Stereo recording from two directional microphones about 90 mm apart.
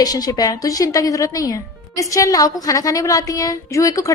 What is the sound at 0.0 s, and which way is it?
Speech, 45° left (ahead or behind).